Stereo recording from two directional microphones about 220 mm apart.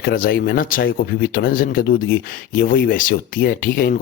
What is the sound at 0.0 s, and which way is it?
Speech, 40° left (ahead or behind).